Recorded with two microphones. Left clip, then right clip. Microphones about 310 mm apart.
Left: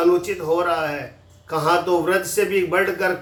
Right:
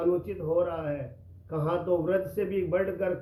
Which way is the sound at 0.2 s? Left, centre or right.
Centre.